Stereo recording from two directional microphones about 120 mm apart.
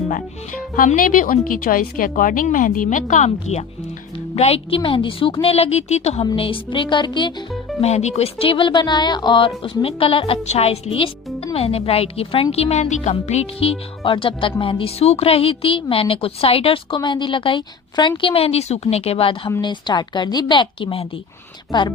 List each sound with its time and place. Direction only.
2.1 s speech: 90° left; by 3.6 s 75° left (ahead or behind)
4.4 s a woman's voice: 55° left (ahead or behind)
6.3 s a woman's voice: 50° left (ahead or behind)
7.8 s a woman's voice: 65° left (ahead or behind)
19.6 s a woman's voice: 40° left (ahead or behind)